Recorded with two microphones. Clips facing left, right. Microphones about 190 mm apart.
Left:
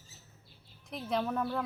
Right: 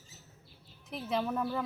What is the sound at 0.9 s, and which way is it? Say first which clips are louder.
Speech: even; centre (ahead or behind).